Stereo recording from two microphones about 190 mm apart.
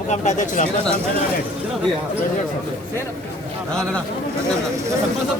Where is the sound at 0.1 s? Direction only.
40° left (ahead or behind).